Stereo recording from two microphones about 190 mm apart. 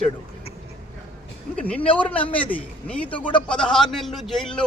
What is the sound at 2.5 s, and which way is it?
A man's voice, 5° left (ahead or behind).